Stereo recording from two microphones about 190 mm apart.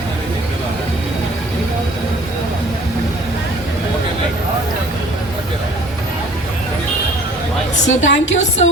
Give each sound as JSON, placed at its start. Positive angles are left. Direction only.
{"t": 7.9, "sound": "a woman's voice", "side_deg": 75}